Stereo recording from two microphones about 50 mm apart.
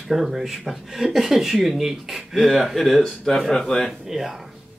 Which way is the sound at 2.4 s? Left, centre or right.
Centre.